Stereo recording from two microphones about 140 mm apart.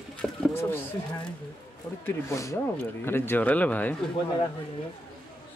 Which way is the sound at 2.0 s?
20° left (ahead or behind).